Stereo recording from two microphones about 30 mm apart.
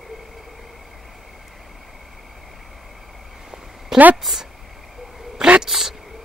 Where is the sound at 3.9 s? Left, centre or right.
Centre.